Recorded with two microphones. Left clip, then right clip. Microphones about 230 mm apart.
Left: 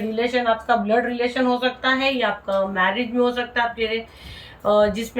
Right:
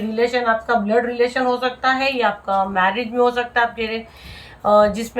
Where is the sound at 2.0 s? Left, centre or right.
Centre.